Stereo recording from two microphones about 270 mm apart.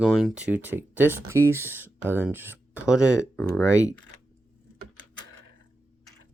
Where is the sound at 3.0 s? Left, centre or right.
Centre.